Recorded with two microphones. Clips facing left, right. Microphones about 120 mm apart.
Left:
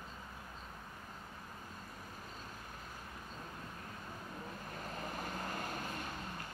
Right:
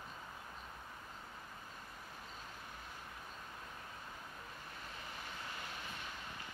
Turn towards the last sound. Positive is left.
turn(degrees=45)  # may be behind; listen again after turning